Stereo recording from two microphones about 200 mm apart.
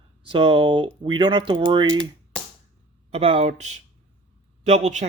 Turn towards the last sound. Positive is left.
turn(degrees=-35)  # may be behind; listen again after turning